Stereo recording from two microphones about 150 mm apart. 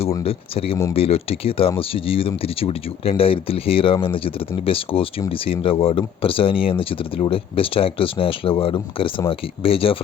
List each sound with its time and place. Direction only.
0.3 s speech: 40° left (ahead or behind)